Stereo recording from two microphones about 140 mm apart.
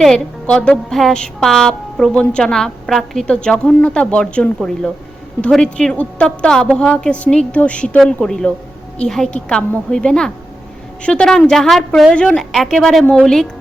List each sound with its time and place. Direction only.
0.0 s a woman's voice: 5° left (ahead or behind)